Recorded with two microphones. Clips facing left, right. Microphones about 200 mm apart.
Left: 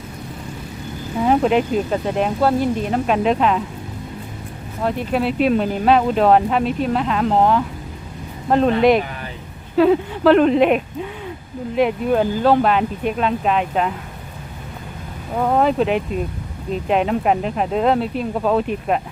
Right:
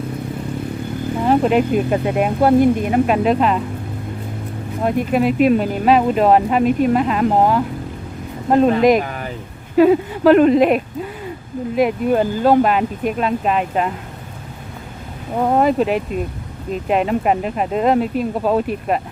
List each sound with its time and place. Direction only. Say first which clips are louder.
1.2 s speech: right 1 dB; centre (ahead or behind)
4.8 s speech: right 3 dB; 10° right (ahead or behind)
8.7 s speech: right 1 dB; 40° right (ahead or behind)
9.7 s speech: right 2 dB; 10° right (ahead or behind)
15.4 s speech: right 1 dB; 10° right (ahead or behind)